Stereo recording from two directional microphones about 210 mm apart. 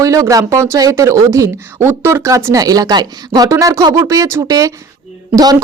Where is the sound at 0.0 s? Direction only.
15° right (ahead or behind).